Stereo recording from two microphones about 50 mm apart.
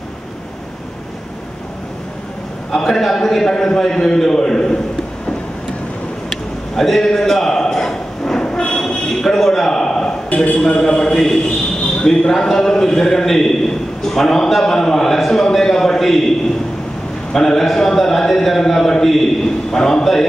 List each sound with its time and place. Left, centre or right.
2.7 s a man's voice: centre
6.8 s train: centre
10.3 s a man's voice: left
10.8 s a man's voice: centre
17.3 s a man's voice: centre